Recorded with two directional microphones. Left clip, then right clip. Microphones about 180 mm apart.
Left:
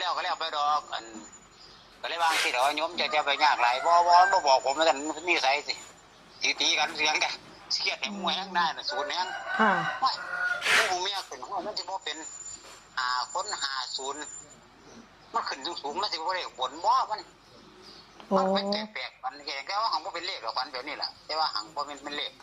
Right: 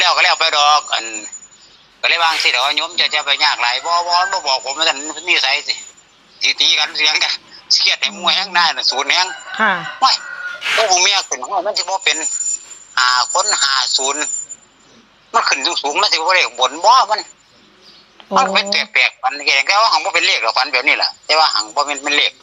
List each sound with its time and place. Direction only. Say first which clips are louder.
0.0 s a sound: right 17 dB; 20° right (ahead or behind)
2.4 s a man's voice: right 11 dB; centre (ahead or behind); by 9.6 s 25° right (ahead or behind)
10.8 s a man's voice: right 16 dB; 25° right (ahead or behind)
11.3 s a man's voice: right 15 dB; 40° right (ahead or behind); by 14.3 s 25° right (ahead or behind)
15.3 s a man's voice: right 17 dB; 25° right (ahead or behind)
18.3 s a man's voice: right 12 dB; 25° right (ahead or behind)